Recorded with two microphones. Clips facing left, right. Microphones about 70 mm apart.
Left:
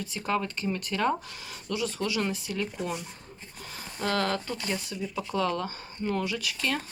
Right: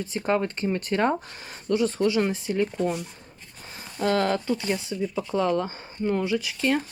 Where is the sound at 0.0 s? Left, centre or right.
Right.